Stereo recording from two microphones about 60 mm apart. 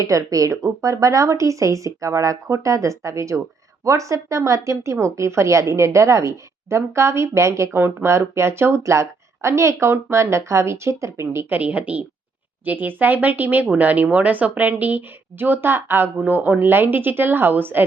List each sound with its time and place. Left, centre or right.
0.0 s a woman's voice: right
11.4 s a woman's voice: right